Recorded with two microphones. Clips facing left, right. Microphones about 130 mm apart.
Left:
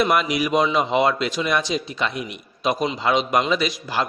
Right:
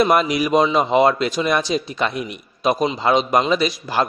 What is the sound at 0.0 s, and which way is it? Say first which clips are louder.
A man's voice: right 3 dB; 40° right (ahead or behind).